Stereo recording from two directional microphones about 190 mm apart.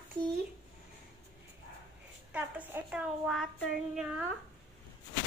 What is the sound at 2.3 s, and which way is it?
Speech, 10° right (ahead or behind).